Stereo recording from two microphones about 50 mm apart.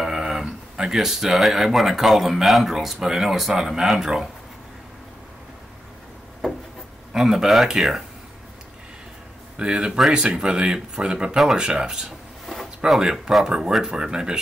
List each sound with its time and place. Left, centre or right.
0.0 s a sound: centre
0.5 s speech: centre
7.1 s speech: centre
9.6 s speech: centre